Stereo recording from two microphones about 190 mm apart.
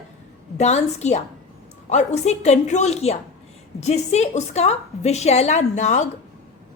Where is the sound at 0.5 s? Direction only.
35° left (ahead or behind).